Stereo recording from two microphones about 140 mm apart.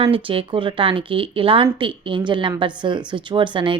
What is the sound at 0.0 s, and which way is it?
A woman's voice, 40° right (ahead or behind).